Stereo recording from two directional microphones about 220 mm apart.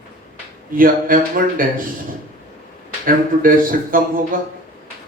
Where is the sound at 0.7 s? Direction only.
40° right (ahead or behind).